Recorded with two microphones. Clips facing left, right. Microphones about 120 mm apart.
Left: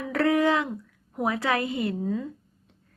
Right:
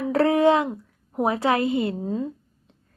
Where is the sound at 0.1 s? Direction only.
25° right (ahead or behind).